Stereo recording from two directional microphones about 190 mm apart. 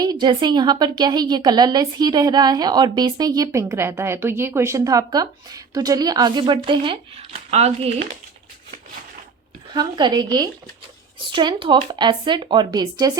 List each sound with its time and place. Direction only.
0.0 s a woman's voice: 20° right (ahead or behind)
9.7 s a woman's voice: 20° right (ahead or behind)